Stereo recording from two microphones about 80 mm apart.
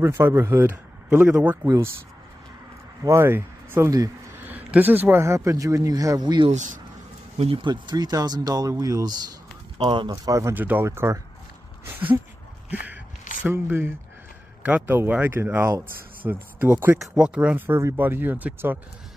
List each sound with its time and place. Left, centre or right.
0.0 s a man's voice: right
3.0 s speech: right
4.5 s speech: right
5.2 s a man's voice: right
7.5 s speech: right
9.8 s speech: right
10.1 s a man's voice: right
10.5 s speech: right
10.9 s speech: right
11.8 s speech: right
12.7 s a sound: right
14.9 s speech: right
17.0 s speech: centre
17.6 s speech: right